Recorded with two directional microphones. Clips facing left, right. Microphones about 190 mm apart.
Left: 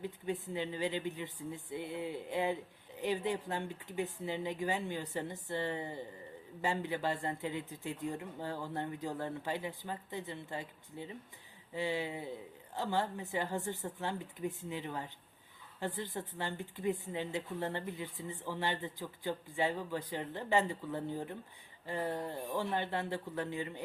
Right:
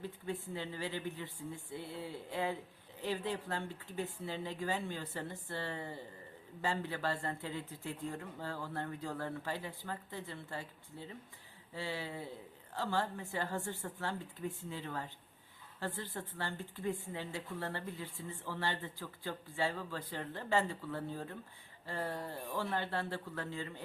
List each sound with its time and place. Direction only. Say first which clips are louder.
0.0 s speech: left 3 dB; 20° left (ahead or behind)